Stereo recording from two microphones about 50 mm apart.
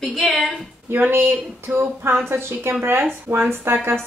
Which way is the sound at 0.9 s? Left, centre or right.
Right.